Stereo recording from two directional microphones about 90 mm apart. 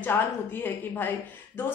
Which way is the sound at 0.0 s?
20° left (ahead or behind).